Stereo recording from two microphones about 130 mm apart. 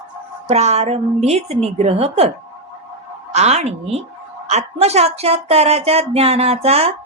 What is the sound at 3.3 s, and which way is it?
A woman's voice, 55° right (ahead or behind).